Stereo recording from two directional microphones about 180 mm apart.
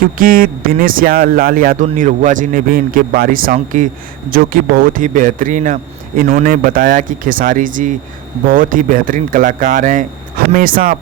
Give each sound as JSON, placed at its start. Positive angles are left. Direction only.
{"t": 0.0, "sound": "speech", "side_deg": -50}